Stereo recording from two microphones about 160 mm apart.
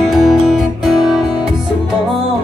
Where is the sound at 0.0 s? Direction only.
Centre (ahead or behind).